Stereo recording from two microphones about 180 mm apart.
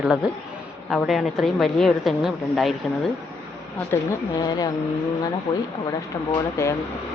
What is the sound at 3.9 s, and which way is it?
A woman's voice, 20° left (ahead or behind).